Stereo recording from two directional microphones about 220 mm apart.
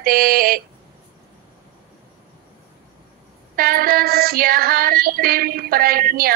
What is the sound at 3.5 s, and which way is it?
Child singing, 40° right (ahead or behind).